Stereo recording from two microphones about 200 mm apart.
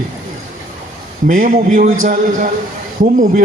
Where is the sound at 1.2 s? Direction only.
40° right (ahead or behind).